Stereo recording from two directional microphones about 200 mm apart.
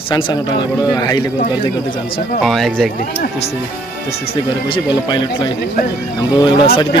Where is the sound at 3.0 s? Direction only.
30° left (ahead or behind).